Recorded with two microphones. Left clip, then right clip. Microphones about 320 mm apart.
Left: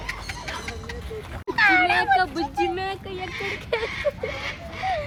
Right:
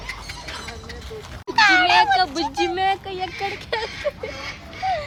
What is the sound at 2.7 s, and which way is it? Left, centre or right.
Speech, right.